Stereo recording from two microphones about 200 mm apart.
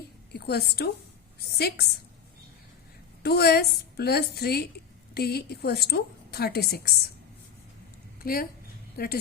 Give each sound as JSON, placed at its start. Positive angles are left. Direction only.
{"t": 0.3, "sound": "a woman's voice", "side_deg": 55}
{"t": 3.2, "sound": "a woman's voice", "side_deg": 50}
{"t": 8.2, "sound": "a woman's voice", "side_deg": 45}